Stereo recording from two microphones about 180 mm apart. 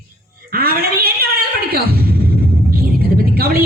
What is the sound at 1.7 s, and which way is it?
Music, 55° right (ahead or behind).